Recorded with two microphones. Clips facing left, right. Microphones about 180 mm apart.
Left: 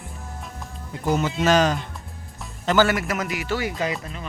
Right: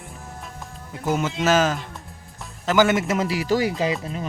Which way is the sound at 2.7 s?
20° right (ahead or behind).